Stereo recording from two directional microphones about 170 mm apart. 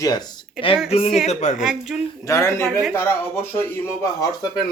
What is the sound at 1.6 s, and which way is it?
Speech, 5° right (ahead or behind).